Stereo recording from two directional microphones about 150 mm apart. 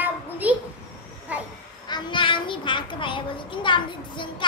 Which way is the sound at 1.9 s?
30° left (ahead or behind).